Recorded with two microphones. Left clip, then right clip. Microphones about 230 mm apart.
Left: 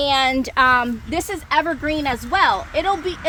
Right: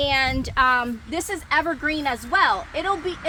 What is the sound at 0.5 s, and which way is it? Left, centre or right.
A woman's voice, left.